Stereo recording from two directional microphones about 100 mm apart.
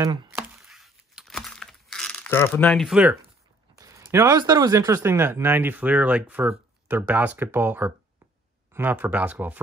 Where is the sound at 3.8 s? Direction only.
30° right (ahead or behind).